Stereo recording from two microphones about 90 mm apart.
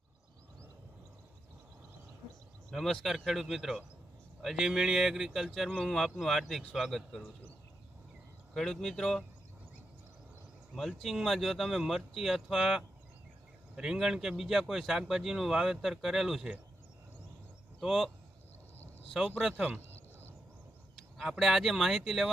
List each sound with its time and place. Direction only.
2.6 s a man's voice: 5° left (ahead or behind)
8.5 s a man's voice: 5° left (ahead or behind)
10.8 s a man's voice: centre (ahead or behind)
17.7 s speech: 5° right (ahead or behind)
19.4 s a man's voice: 5° right (ahead or behind)
21.2 s a man's voice: centre (ahead or behind)